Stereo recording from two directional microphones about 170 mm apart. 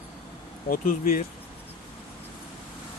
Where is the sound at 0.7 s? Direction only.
55° left (ahead or behind).